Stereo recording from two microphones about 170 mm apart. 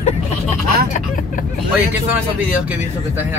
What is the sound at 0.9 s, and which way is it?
Speech, 50° left (ahead or behind).